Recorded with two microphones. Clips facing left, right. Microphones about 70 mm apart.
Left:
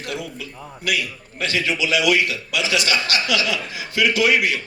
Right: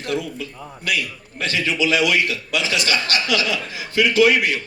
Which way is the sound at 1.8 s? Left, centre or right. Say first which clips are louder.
Right 1 dB; right.